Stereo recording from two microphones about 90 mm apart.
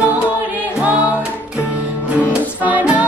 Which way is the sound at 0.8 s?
15° right (ahead or behind).